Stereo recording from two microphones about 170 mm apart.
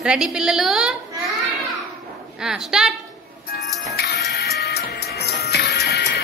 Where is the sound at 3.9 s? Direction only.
70° left (ahead or behind).